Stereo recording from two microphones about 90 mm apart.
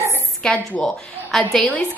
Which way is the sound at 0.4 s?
10° left (ahead or behind).